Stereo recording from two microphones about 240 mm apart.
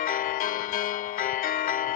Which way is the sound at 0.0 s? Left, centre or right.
Left.